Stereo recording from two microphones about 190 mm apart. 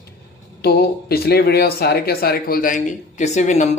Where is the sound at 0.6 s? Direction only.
55° left (ahead or behind).